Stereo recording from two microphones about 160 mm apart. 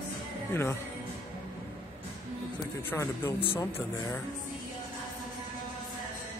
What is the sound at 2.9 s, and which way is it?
Speech, 15° left (ahead or behind).